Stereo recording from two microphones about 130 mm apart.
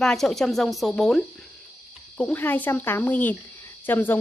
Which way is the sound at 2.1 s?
10° left (ahead or behind).